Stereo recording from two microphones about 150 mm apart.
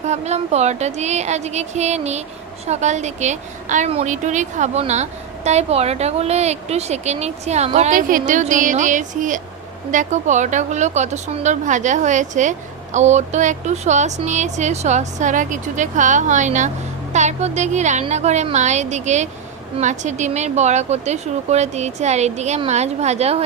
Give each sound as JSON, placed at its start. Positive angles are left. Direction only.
{"t": 0.0, "sound": "a woman's voice", "side_deg": -50}
{"t": 8.3, "sound": "a woman's voice", "side_deg": -55}